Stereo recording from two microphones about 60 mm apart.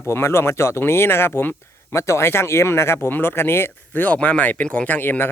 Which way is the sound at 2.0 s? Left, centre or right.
Left.